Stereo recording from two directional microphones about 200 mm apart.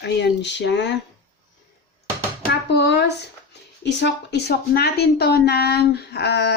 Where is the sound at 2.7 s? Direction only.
55° left (ahead or behind).